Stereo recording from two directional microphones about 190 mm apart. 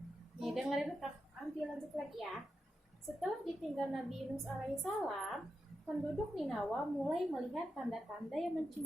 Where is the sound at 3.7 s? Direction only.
Centre (ahead or behind).